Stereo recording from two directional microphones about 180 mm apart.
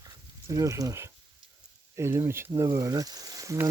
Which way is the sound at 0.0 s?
20° right (ahead or behind).